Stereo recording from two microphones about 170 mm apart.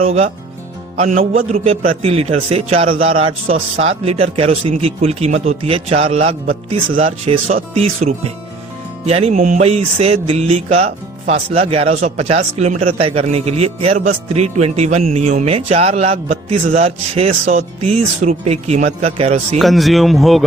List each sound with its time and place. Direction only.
0.0 s a man's voice: 40° right (ahead or behind)
9.3 s a man's voice: 50° right (ahead or behind)
19.5 s speech: centre (ahead or behind)